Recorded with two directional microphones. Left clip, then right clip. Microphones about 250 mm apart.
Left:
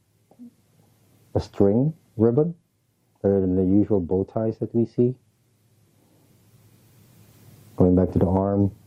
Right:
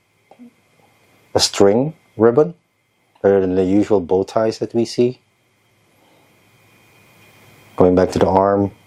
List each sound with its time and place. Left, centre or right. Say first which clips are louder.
1.3 s speech: right 8 dB; centre
7.8 s speech: right 7 dB; centre